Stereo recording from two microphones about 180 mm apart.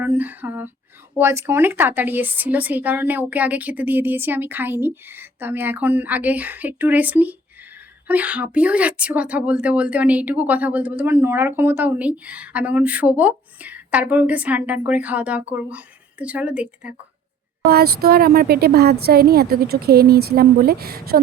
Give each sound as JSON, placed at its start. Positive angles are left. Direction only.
{"t": 0.0, "sound": "speech", "side_deg": -10}
{"t": 17.7, "sound": "speech", "side_deg": -60}